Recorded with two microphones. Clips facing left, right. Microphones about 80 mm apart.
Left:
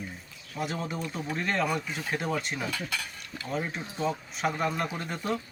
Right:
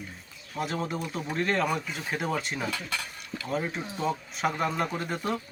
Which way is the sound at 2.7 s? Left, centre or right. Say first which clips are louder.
Even; right.